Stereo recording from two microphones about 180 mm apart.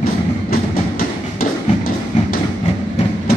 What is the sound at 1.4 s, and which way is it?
Tap, 50° left (ahead or behind).